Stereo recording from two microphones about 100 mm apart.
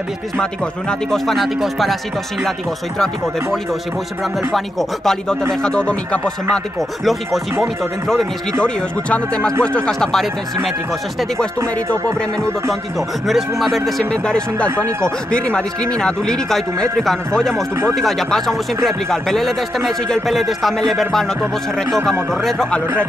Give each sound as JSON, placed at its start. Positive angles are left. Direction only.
{"t": 0.4, "sound": "speech", "side_deg": 5}
{"t": 4.5, "sound": "speech", "side_deg": 0}
{"t": 8.6, "sound": "speech", "side_deg": 10}
{"t": 13.3, "sound": "speech", "side_deg": 0}
{"t": 14.8, "sound": "speech", "side_deg": -25}
{"t": 15.3, "sound": "speech", "side_deg": 10}